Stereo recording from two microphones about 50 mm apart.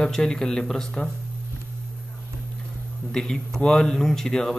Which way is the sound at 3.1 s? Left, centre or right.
Centre.